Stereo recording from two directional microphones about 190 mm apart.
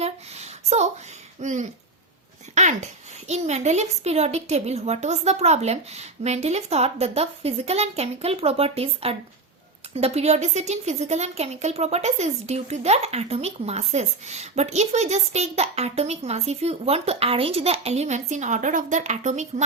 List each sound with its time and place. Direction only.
0.0 s a sound: 35° right (ahead or behind)
1.4 s throat clearing: 40° right (ahead or behind)
2.6 s a woman's voice: 35° right (ahead or behind)